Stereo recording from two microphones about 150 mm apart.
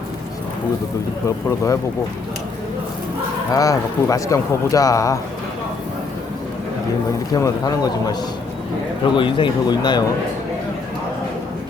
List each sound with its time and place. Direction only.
1.5 s a man's voice: 20° left (ahead or behind)
3.5 s a man's voice: 25° left (ahead or behind)
7.3 s a man's voice: 25° left (ahead or behind)
9.1 s speech: 30° left (ahead or behind)